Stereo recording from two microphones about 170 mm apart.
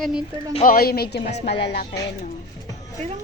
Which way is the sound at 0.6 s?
60° left (ahead or behind).